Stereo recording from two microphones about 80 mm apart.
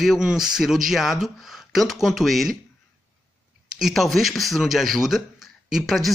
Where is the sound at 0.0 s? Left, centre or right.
Centre.